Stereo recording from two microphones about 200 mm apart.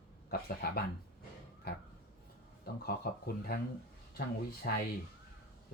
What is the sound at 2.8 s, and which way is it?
Speech, 50° left (ahead or behind).